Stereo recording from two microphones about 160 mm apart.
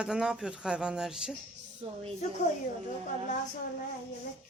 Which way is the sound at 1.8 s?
40° right (ahead or behind).